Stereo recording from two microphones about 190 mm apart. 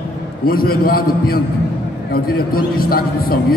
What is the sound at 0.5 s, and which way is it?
A man's voice, 50° left (ahead or behind).